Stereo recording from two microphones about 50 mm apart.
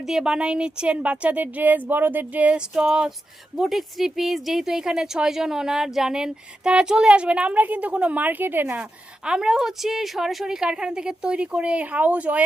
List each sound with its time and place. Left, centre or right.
0.0 s speech: centre; by 2.6 s right
2.6 s speech: centre
3.6 s speech: centre; by 8.8 s right
9.2 s speech: centre